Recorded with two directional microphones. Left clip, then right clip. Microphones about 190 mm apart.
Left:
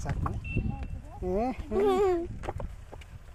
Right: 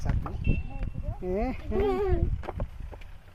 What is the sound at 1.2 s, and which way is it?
Speech, 5° left (ahead or behind).